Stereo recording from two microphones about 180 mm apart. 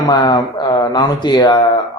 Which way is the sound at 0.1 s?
25° left (ahead or behind).